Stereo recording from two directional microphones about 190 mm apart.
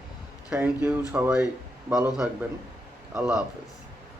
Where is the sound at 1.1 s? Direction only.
5° right (ahead or behind).